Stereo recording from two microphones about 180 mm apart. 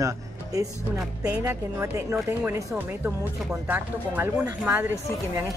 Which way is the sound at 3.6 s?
10° right (ahead or behind).